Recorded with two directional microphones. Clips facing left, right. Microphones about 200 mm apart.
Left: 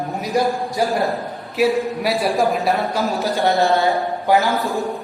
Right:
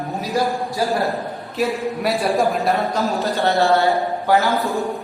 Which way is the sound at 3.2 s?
20° left (ahead or behind).